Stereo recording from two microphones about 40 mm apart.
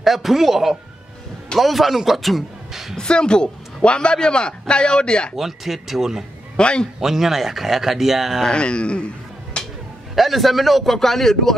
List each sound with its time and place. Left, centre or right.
0.0 s a man's voice: centre
3.0 s a man's voice: left
5.3 s speech: centre
6.5 s a man's voice: left
7.0 s speech: centre
8.5 s a man's voice: left
10.1 s a man's voice: centre